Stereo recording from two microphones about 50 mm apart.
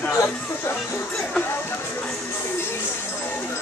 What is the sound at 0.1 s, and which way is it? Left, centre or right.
Music, left.